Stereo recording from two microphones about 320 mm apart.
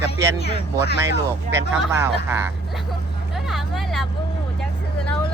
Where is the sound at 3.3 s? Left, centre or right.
Centre.